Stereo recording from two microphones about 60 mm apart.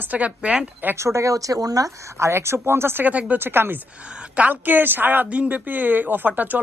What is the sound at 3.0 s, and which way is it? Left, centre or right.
Speech, right.